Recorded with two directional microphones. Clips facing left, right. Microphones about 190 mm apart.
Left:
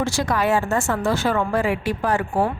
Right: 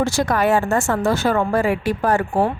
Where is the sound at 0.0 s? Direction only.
45° right (ahead or behind).